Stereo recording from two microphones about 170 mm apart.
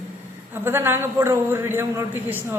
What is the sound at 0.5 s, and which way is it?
A man's voice, 15° right (ahead or behind).